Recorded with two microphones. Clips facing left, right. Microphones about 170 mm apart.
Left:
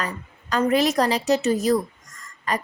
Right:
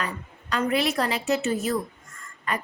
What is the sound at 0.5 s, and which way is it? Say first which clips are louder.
Speech: left 5 dB; 40° left (ahead or behind).